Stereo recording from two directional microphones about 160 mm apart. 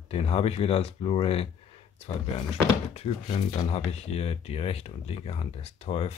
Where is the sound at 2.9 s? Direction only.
45° left (ahead or behind).